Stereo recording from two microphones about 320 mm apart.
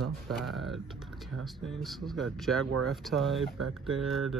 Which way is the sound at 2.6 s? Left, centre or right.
Right.